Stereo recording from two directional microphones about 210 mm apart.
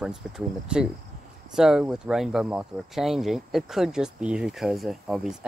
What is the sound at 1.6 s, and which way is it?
Speech, centre (ahead or behind).